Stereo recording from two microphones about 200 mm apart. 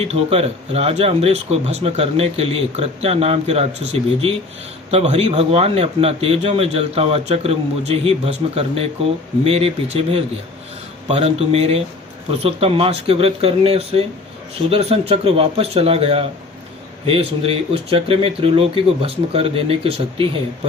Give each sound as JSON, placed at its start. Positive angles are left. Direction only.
{"t": 0.0, "sound": "a man's voice", "side_deg": -30}
{"t": 4.9, "sound": "a man's voice", "side_deg": -30}